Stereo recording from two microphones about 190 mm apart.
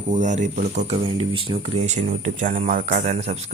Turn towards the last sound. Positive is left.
turn(degrees=-35)  # may be behind; listen again after turning